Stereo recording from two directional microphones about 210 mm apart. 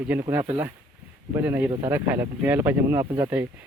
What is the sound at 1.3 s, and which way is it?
Speech, 10° right (ahead or behind).